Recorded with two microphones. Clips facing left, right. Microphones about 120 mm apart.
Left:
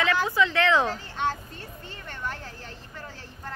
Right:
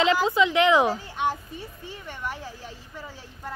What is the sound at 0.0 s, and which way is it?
A woman's voice, 20° right (ahead or behind).